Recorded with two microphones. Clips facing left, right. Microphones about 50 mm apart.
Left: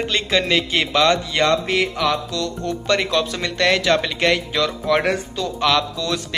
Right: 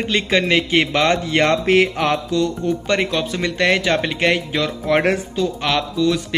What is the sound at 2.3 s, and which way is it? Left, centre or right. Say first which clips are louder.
Speech: right 5 dB; centre.